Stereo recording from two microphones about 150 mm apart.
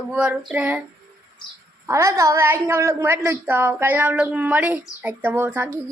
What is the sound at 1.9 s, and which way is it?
A woman's voice, 20° right (ahead or behind).